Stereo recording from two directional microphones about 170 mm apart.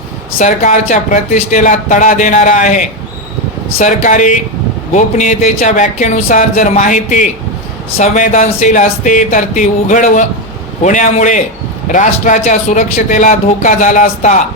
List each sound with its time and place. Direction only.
0.3 s speech: 50° left (ahead or behind)